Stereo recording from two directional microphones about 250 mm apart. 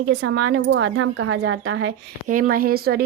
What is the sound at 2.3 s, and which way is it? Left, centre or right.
Speech, right.